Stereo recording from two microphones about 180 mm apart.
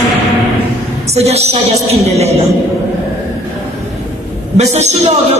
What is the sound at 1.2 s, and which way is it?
A man's voice, 35° right (ahead or behind).